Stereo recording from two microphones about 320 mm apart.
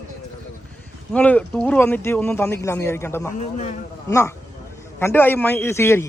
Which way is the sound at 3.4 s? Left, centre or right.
Left.